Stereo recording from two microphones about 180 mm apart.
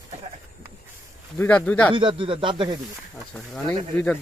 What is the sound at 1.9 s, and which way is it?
Speech, 30° right (ahead or behind).